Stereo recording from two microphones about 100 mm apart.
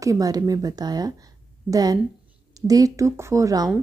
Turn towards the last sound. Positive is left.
turn(degrees=-35)  # may be behind; listen again after turning